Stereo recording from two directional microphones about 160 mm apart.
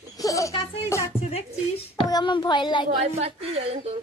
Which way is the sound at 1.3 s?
40° left (ahead or behind).